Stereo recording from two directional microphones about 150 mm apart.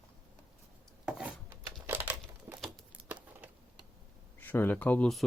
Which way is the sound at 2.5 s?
10° right (ahead or behind).